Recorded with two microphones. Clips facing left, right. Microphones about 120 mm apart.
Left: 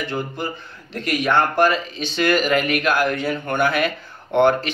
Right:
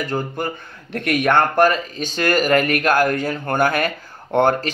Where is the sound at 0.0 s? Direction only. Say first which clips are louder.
Right 2 dB; 45° right (ahead or behind).